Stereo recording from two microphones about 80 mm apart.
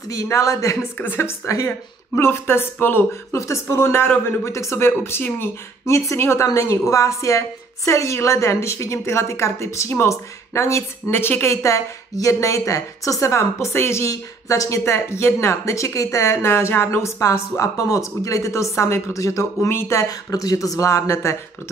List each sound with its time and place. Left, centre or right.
0.1 s a woman's voice: left
0.9 s a woman's voice: left
11.5 s a woman's voice: left